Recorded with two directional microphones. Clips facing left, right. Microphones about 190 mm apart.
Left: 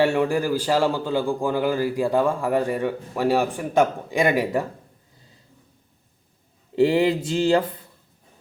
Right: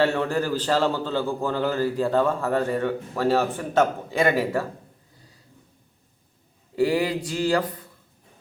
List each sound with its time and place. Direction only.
0.0 s a man's voice: 10° left (ahead or behind)
6.7 s speech: 25° left (ahead or behind)